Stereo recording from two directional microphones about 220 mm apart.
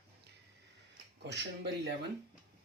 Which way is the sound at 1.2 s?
50° right (ahead or behind).